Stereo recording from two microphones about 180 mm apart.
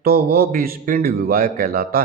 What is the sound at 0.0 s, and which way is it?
A man's voice, 55° right (ahead or behind).